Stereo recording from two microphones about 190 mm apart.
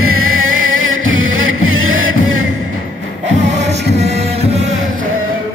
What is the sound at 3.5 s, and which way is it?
Music, 35° right (ahead or behind).